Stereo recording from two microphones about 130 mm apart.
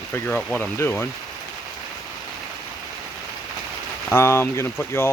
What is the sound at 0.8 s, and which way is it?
Speech, 15° left (ahead or behind).